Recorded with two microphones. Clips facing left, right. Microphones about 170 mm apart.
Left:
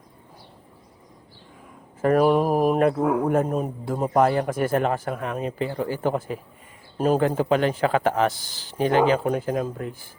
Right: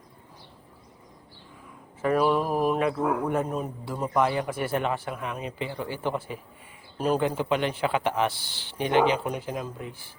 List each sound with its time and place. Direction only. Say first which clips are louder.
2.0 s speech: left 5 dB; 45° left (ahead or behind)